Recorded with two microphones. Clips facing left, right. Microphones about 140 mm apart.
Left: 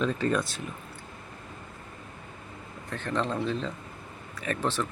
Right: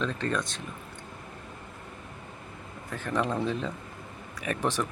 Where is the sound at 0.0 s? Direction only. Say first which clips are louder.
Left 3 dB; 5° left (ahead or behind).